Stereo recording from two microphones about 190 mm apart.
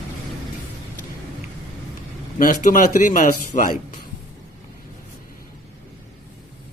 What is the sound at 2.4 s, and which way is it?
A man's voice, 45° left (ahead or behind).